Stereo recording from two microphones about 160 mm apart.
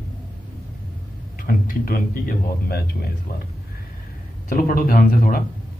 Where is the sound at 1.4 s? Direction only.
60° left (ahead or behind).